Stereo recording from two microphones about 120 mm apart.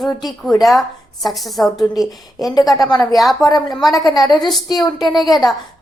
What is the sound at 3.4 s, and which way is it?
Speech, 30° left (ahead or behind).